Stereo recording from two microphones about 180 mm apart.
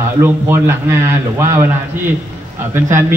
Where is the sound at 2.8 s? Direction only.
15° right (ahead or behind).